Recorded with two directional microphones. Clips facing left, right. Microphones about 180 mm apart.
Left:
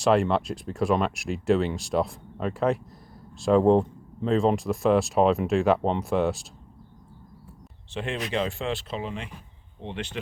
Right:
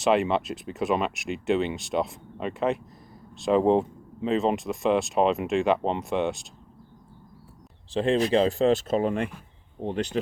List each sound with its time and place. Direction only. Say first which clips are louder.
0.0 s speech: left 1 dB; centre (ahead or behind)
7.9 s speech: right 8 dB; 35° right (ahead or behind); by 9.3 s 50° right (ahead or behind)
9.8 s speech: right 6 dB; 40° right (ahead or behind)